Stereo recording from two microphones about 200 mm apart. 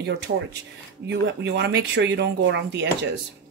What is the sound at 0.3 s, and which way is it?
Speech, 55° right (ahead or behind).